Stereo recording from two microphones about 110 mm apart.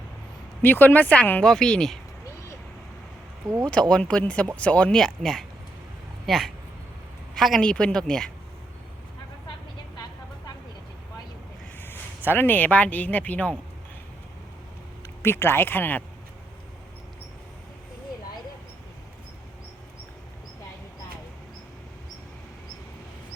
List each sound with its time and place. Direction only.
0.6 s speech: 20° left (ahead or behind)
3.7 s a woman's voice: 10° left (ahead or behind)
11.8 s speech: 20° left (ahead or behind)
15.2 s speech: 20° left (ahead or behind)